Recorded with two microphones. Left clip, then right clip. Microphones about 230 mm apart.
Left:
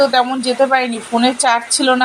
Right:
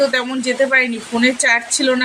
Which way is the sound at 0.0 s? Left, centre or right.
Centre.